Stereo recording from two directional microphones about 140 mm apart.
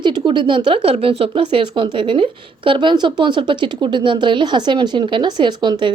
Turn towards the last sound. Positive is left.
turn(degrees=-30)  # may be behind; listen again after turning